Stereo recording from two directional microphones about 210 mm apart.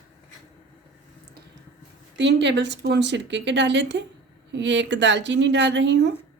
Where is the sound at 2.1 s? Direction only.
55° right (ahead or behind).